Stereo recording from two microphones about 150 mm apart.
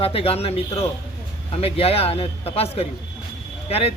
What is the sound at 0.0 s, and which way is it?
A man's voice, 40° left (ahead or behind).